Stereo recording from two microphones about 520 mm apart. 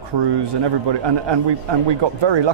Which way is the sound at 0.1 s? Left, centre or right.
Right.